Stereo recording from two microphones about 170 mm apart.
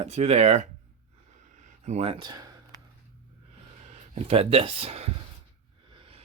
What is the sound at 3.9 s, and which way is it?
Speech, 40° right (ahead or behind).